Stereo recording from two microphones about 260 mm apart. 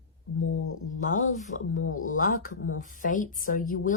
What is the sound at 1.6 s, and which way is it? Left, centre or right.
Speech, left.